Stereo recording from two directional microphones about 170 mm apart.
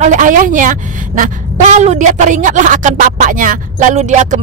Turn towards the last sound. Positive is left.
turn(degrees=-45)  # may be behind; listen again after turning